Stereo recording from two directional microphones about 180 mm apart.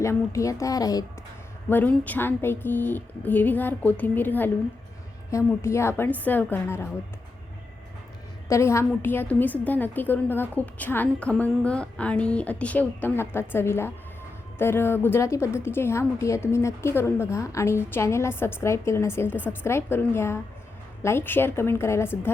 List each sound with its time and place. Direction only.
0.0 s a woman's voice: 15° left (ahead or behind)
1.7 s a woman's voice: 10° left (ahead or behind)
8.4 s a woman's voice: 15° left (ahead or behind)